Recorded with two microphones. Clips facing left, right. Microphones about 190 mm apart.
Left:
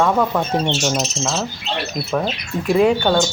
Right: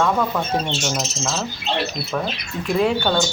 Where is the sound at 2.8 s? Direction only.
5° left (ahead or behind).